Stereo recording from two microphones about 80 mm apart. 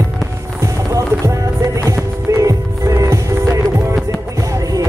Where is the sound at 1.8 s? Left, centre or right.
Right.